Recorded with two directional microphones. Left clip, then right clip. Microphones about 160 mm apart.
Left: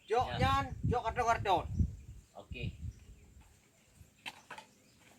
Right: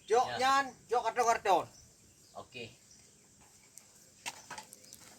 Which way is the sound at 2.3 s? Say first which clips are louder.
Right 2 dB; 20° right (ahead or behind).